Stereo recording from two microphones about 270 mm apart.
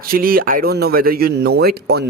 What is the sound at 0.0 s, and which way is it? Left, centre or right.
Speech, right.